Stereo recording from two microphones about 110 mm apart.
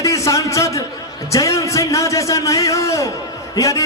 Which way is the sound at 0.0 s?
30° left (ahead or behind).